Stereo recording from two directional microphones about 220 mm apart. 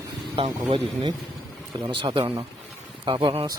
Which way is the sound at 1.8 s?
20° right (ahead or behind).